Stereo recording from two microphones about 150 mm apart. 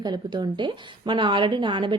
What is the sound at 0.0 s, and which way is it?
A woman's voice, 30° right (ahead or behind).